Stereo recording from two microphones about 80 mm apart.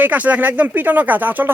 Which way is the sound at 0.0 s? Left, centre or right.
Centre.